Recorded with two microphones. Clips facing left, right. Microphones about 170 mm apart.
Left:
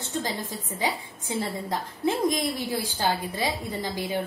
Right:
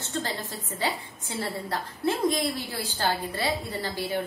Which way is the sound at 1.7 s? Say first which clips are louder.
Left 1 dB; 15° left (ahead or behind).